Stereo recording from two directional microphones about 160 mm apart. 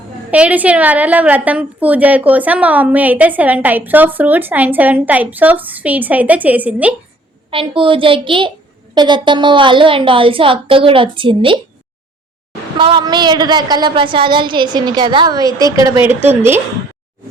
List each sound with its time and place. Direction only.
0.3 s a woman's voice: 10° right (ahead or behind)
7.5 s a woman's voice: 35° right (ahead or behind)
12.8 s a woman's voice: 30° right (ahead or behind); by 16.6 s 15° right (ahead or behind)